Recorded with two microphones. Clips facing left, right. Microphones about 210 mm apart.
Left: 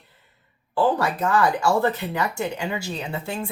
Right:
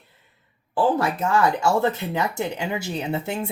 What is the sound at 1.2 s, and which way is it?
Speech, 25° right (ahead or behind).